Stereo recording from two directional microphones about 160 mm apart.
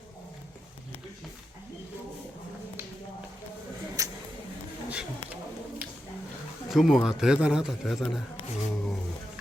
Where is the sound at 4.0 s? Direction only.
20° right (ahead or behind).